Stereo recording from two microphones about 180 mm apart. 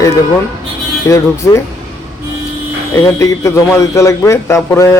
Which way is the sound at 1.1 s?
15° left (ahead or behind).